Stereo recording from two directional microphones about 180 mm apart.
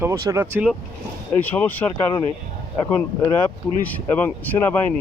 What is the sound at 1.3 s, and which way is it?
Speech, 10° left (ahead or behind).